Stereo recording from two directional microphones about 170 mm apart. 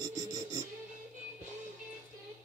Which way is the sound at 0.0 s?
20° right (ahead or behind).